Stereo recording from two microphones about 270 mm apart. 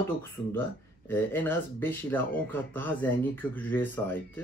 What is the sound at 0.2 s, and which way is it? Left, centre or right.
Speech, centre.